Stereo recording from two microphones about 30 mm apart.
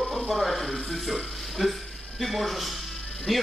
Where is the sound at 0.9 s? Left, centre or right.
Centre.